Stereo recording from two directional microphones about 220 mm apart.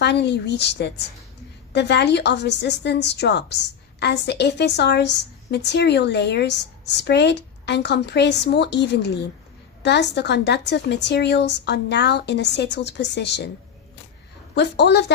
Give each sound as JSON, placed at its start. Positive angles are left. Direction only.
{"t": 0.0, "sound": "a woman's voice", "side_deg": 50}
{"t": 14.5, "sound": "a woman's voice", "side_deg": 50}